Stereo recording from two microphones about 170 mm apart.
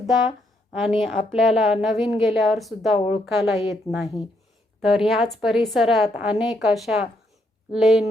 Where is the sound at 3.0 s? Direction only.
35° left (ahead or behind).